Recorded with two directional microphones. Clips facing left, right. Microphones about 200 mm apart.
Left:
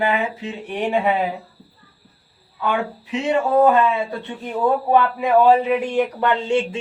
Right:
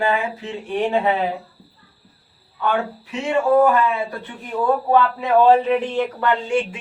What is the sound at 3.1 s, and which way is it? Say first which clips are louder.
A man's voice: right 1 dB; 20° left (ahead or behind).